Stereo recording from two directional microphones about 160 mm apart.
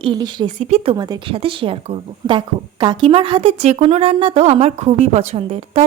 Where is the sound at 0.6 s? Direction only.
40° right (ahead or behind).